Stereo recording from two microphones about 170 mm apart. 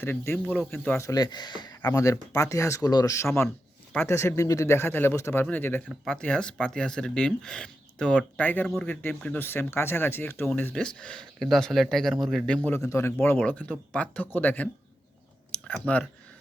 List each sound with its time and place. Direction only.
0.0 s a man's voice: 10° left (ahead or behind)
12.6 s a man's voice: 15° left (ahead or behind)
15.5 s clicking: 5° left (ahead or behind)